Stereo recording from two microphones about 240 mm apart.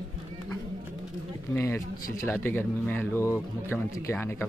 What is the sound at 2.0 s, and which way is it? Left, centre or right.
Speech, left.